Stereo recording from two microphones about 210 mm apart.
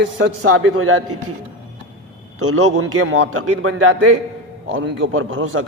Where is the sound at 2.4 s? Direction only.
90° right.